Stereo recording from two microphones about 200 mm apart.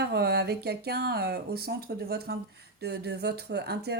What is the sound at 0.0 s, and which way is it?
Speech, 55° right (ahead or behind).